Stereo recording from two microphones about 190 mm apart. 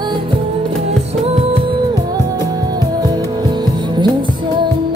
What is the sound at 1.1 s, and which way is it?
Music, 30° right (ahead or behind).